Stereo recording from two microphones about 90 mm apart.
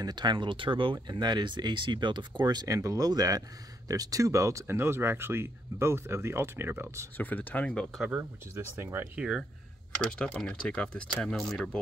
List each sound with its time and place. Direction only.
0.0 s speech: 55° right (ahead or behind); by 0.9 s 75° right (ahead or behind)
1.0 s speech: 55° right (ahead or behind); by 7.1 s 25° right (ahead or behind)
7.2 s speech: 20° left (ahead or behind)
8.1 s speech: 25° right (ahead or behind)
9.1 s speech: 15° right (ahead or behind)
10.1 s speech: 10° left (ahead or behind)